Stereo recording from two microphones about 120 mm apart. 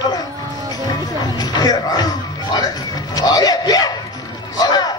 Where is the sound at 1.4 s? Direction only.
35° left (ahead or behind).